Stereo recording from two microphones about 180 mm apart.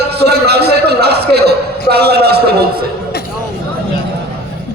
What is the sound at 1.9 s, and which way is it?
Speech, 65° right (ahead or behind).